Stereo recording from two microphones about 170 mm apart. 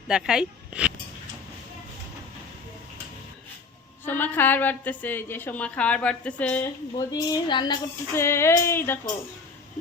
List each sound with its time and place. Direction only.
0.1 s speech: 5° right (ahead or behind)
4.0 s a woman's voice: 10° left (ahead or behind)
6.9 s a woman's voice: 25° left (ahead or behind)
8.1 s a woman's voice: 15° left (ahead or behind)